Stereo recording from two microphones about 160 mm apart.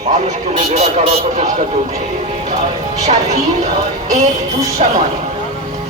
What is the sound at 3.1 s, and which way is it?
Speech, 45° right (ahead or behind).